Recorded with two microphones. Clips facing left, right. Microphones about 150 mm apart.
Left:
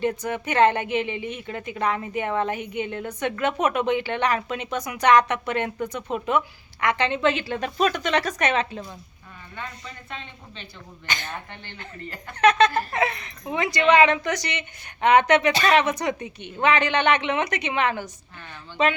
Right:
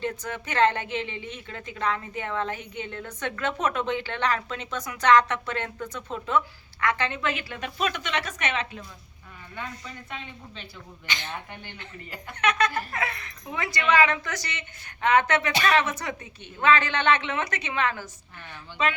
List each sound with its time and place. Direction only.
0.0 s a woman's voice: 15° left (ahead or behind); by 8.8 s 35° left (ahead or behind)
10.1 s a woman's voice: 5° right (ahead or behind)
11.0 s a man's voice: 45° left (ahead or behind)
11.3 s speech: 10° right (ahead or behind)
12.4 s a woman's voice: 30° left (ahead or behind)